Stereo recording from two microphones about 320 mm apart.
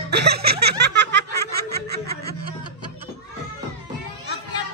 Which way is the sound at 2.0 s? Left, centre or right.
Right.